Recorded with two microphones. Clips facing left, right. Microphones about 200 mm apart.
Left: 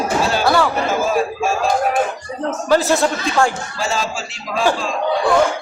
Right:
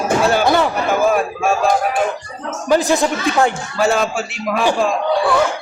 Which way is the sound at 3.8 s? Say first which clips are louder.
Right 6 dB; 60° right (ahead or behind).